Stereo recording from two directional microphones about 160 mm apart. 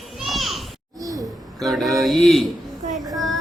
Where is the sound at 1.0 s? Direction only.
25° right (ahead or behind).